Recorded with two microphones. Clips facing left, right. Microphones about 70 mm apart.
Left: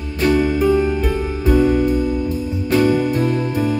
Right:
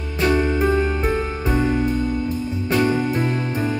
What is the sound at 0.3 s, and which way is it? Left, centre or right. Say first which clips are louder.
Music: left 4 dB; centre.